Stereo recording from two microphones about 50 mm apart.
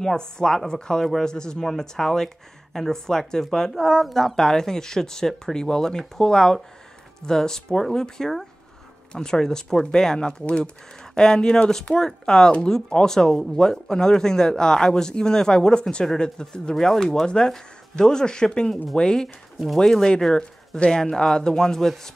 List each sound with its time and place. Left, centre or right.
0.0 s speech: centre
16.7 s speech: centre
19.2 s speech: centre